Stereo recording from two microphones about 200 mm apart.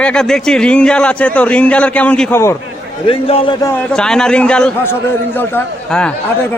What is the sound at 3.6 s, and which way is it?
A man's voice, 5° left (ahead or behind).